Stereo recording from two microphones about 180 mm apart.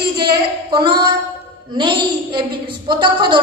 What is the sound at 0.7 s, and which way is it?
A woman's voice, 25° right (ahead or behind).